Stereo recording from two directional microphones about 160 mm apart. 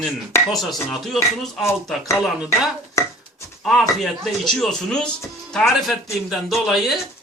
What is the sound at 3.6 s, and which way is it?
Speech, centre (ahead or behind).